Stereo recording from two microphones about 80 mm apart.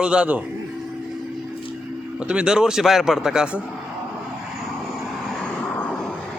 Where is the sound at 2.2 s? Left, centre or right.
Centre.